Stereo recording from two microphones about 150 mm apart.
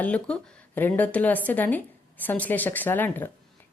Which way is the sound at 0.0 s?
10° left (ahead or behind).